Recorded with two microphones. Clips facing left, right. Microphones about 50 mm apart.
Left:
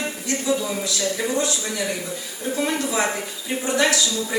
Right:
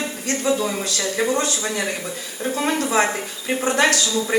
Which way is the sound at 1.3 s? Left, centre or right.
Right.